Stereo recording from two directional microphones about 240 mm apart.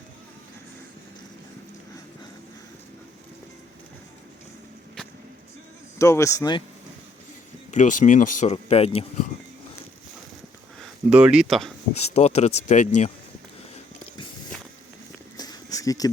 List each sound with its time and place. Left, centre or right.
6.0 s a man's voice: centre
7.7 s speech: left
11.1 s speech: centre
11.9 s speech: left
15.4 s a sound: centre